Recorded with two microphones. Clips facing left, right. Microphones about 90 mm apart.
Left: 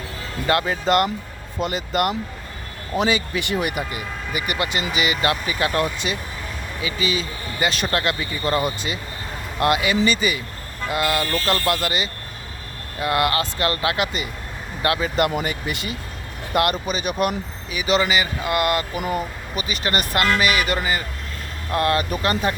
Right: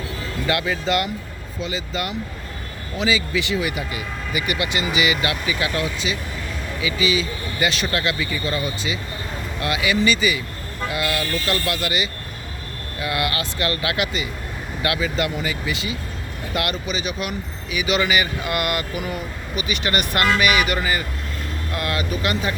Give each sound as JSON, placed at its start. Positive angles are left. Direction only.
{"t": 0.4, "sound": "speech", "side_deg": 40}
{"t": 15.1, "sound": "speech", "side_deg": 50}
{"t": 18.0, "sound": "a man's voice", "side_deg": 25}
{"t": 21.7, "sound": "speech", "side_deg": 40}